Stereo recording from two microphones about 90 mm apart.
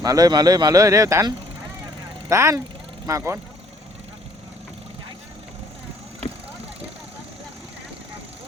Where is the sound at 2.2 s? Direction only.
35° right (ahead or behind).